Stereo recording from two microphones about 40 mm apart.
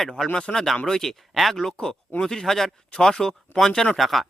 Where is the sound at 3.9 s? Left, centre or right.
Centre.